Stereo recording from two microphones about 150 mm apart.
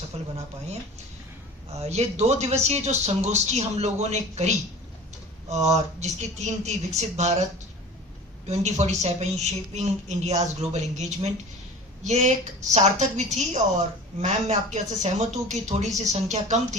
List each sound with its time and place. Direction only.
0.1 s a sound: 40° right (ahead or behind)
1.8 s speech: 45° right (ahead or behind)
8.4 s speech: 50° right (ahead or behind)